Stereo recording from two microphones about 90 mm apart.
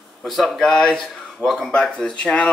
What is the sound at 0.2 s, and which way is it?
Speech, 5° left (ahead or behind).